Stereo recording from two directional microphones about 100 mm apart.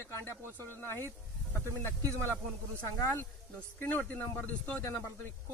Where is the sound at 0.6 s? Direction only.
20° left (ahead or behind).